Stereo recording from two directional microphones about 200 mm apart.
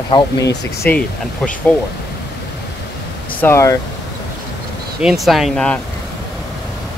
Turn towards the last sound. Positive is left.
turn(degrees=0)  # may be behind; listen again after turning